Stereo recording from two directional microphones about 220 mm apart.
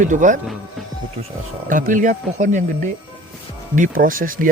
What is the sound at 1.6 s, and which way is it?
Speech, 35° right (ahead or behind).